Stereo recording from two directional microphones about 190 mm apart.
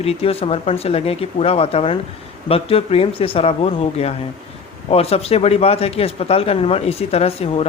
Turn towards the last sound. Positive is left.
turn(degrees=30)  # may be behind; listen again after turning